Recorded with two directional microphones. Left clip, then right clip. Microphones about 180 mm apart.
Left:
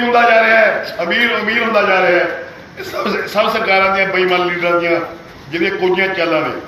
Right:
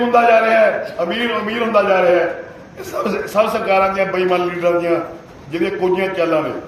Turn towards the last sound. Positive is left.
turn(degrees=-15)  # may be behind; listen again after turning